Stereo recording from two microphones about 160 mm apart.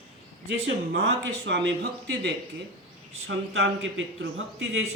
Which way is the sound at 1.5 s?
90° right.